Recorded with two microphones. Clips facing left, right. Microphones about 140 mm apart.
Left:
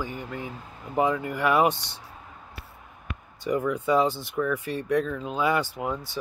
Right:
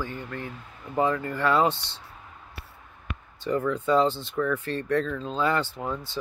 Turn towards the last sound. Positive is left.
turn(degrees=15)  # may be behind; listen again after turning